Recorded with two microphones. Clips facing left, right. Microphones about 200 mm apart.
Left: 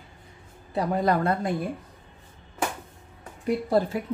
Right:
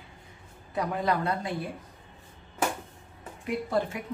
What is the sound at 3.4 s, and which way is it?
Speech, 35° left (ahead or behind).